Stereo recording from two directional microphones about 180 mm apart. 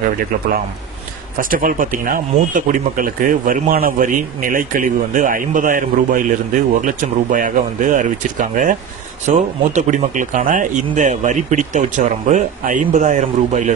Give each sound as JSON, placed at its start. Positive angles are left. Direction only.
{"t": 1.4, "sound": "speech", "side_deg": -50}